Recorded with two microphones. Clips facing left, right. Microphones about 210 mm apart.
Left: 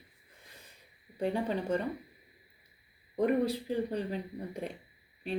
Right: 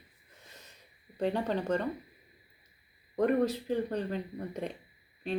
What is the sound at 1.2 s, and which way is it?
Speech, 10° left (ahead or behind).